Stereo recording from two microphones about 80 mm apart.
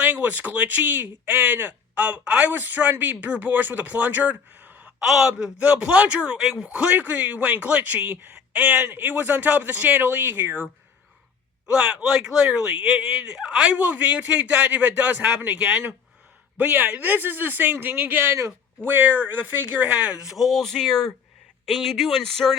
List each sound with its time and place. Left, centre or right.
0.0 s speech: right
4.9 s a man's voice: centre
5.3 s a man's voice: centre
6.7 s speech: centre
11.7 s a man's voice: centre; by 18.5 s right
18.8 s a man's voice: right; by 22.5 s centre